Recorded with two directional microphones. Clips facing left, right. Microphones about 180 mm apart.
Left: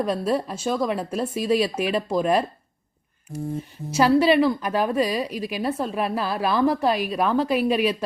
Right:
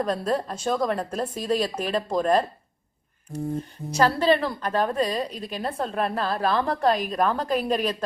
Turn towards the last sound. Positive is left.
turn(degrees=5)  # may be behind; listen again after turning